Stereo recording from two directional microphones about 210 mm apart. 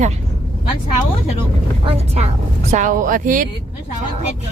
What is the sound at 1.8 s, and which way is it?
A woman's voice, 30° right (ahead or behind).